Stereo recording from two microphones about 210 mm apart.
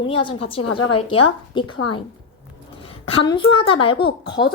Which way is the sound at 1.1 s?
25° left (ahead or behind).